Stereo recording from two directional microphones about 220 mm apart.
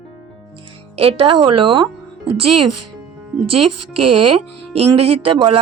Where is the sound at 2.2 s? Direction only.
90° right.